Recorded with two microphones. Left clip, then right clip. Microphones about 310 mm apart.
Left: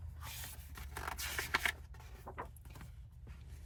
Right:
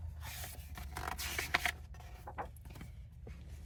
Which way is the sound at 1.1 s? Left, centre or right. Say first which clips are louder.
Right 2 dB; centre.